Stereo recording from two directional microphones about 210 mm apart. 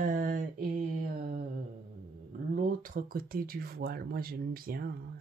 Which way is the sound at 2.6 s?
40° right (ahead or behind).